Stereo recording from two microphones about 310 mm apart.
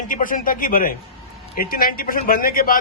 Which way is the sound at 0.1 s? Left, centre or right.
Left.